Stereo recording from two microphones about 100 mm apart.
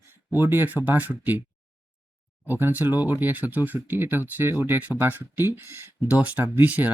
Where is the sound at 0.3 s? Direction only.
20° right (ahead or behind).